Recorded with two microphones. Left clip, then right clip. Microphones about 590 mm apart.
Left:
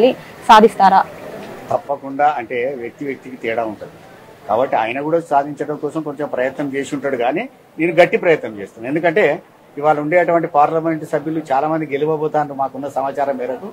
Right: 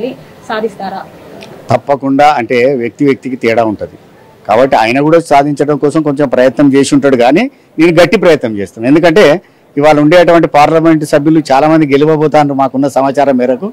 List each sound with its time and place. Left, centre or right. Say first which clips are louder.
0.0 s a woman's voice: left 6 dB; left
1.9 s speech: right 10 dB; right